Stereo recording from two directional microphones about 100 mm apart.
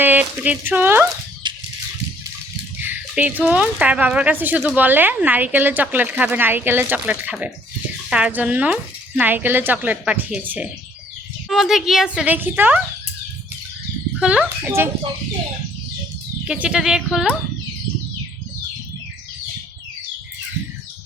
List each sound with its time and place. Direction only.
0.0 s speech: 15° right (ahead or behind)
1.5 s a sound: 50° right (ahead or behind)
2.7 s speech: 15° right (ahead or behind)
11.4 s speech: centre (ahead or behind)
12.1 s speech: 15° right (ahead or behind)
14.2 s speech: 10° right (ahead or behind)
16.5 s speech: 10° right (ahead or behind)